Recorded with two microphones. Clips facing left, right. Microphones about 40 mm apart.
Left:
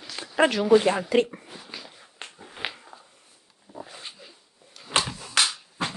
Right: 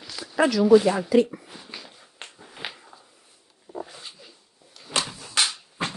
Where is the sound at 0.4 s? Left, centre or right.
Left.